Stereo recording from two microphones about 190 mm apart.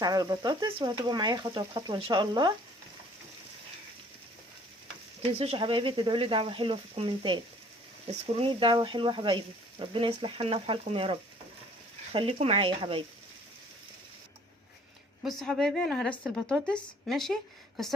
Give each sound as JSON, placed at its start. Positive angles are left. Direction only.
{"t": 0.0, "sound": "speech", "side_deg": -20}
{"t": 5.4, "sound": "speech", "side_deg": -30}
{"t": 15.2, "sound": "a woman's voice", "side_deg": 0}